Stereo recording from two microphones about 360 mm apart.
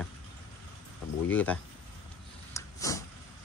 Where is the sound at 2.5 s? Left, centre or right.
Centre.